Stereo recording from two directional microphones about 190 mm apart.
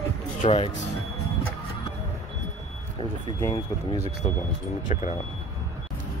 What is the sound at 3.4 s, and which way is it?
Speech, 20° left (ahead or behind).